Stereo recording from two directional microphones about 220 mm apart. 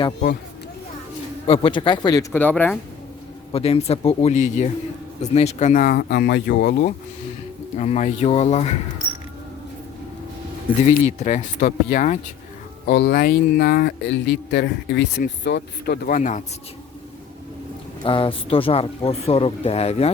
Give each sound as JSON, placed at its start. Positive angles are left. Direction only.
{"t": 1.5, "sound": "speech", "side_deg": 20}
{"t": 3.5, "sound": "speech", "side_deg": 30}
{"t": 7.8, "sound": "speech", "side_deg": 30}
{"t": 10.8, "sound": "speech", "side_deg": 30}
{"t": 12.8, "sound": "speech", "side_deg": 45}
{"t": 18.0, "sound": "speech", "side_deg": 25}